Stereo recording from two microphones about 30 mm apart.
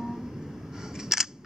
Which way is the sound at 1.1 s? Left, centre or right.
Centre.